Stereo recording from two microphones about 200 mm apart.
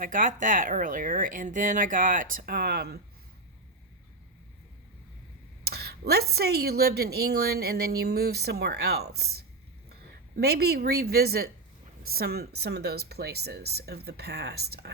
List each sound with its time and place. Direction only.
0.0 s speech: 40° right (ahead or behind)
5.6 s a woman's voice: 50° right (ahead or behind)
10.4 s a woman's voice: 55° right (ahead or behind)